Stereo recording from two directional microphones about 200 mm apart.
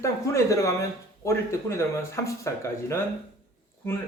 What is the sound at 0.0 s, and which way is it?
Speech, 15° left (ahead or behind).